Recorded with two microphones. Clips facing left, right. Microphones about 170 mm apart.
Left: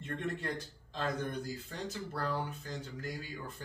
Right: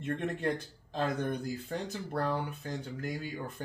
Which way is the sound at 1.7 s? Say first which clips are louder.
Right 5 dB; 50° right (ahead or behind).